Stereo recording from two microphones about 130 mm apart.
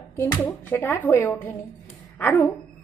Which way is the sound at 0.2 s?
25° left (ahead or behind).